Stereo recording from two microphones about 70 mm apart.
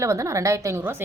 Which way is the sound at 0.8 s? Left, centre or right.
Right.